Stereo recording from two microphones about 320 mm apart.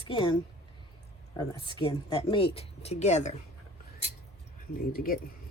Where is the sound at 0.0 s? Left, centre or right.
Centre.